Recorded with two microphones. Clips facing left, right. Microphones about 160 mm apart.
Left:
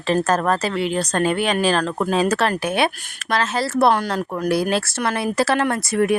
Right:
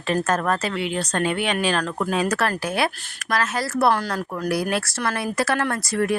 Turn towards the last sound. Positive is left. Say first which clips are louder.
# left 4 dB
turn(degrees=20)  # may be behind; listen again after turning